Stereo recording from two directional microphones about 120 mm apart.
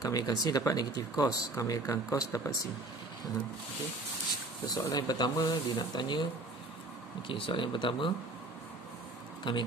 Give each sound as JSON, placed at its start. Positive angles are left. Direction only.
{"t": 0.0, "sound": "speech", "side_deg": 30}
{"t": 4.6, "sound": "speech", "side_deg": 35}
{"t": 7.2, "sound": "speech", "side_deg": 45}
{"t": 9.4, "sound": "speech", "side_deg": 40}